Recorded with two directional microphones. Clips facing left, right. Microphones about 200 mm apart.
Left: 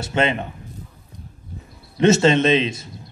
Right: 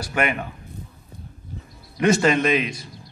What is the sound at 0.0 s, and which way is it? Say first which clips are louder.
Speech: left 3 dB; 25° left (ahead or behind).